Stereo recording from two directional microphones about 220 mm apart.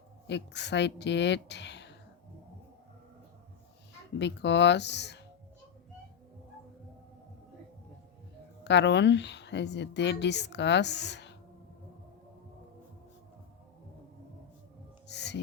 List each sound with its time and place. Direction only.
0.3 s a woman's voice: 50° left (ahead or behind)
4.2 s a woman's voice: 50° left (ahead or behind)
8.6 s a woman's voice: 50° left (ahead or behind)
15.0 s music: 50° left (ahead or behind)